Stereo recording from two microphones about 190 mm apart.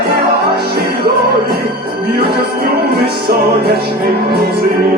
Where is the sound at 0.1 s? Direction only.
60° right (ahead or behind).